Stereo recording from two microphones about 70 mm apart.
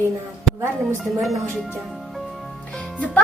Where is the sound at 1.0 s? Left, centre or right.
Centre.